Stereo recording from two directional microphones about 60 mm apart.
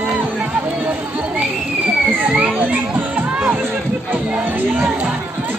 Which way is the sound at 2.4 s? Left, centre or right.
Right.